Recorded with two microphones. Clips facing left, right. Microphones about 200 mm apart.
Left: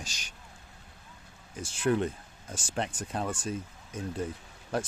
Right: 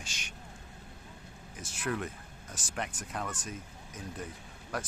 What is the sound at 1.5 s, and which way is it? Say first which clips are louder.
Speech: left 8 dB; 30° left (ahead or behind).